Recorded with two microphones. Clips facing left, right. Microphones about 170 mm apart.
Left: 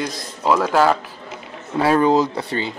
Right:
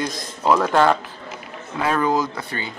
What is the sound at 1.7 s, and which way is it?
Speech, 30° left (ahead or behind).